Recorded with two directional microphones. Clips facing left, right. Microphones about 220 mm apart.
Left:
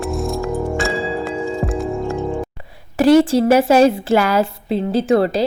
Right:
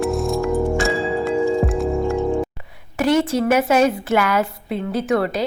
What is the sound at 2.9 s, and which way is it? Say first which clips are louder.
A woman's voice: left 6 dB; 30° left (ahead or behind).